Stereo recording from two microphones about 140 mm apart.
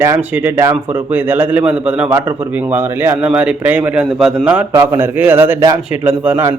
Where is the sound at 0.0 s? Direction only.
15° right (ahead or behind).